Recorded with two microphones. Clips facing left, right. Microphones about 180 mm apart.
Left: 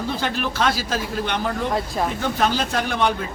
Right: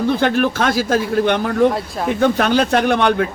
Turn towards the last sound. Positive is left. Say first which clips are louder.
# right 7 dB
turn(degrees=-65)  # may be behind; listen again after turning